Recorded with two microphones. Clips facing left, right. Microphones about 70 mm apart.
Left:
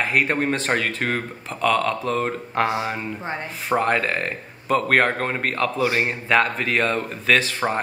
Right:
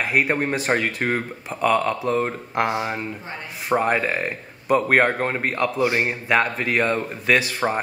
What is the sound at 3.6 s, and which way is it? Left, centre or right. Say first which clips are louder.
Speech: even; centre.